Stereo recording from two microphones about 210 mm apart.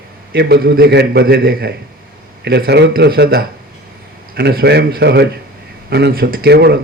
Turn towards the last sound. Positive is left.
turn(degrees=-50)  # may be behind; listen again after turning